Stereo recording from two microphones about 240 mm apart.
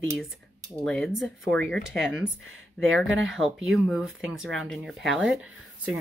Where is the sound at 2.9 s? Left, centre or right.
Right.